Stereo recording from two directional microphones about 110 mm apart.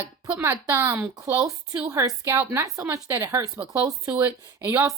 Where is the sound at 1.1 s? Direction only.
30° right (ahead or behind).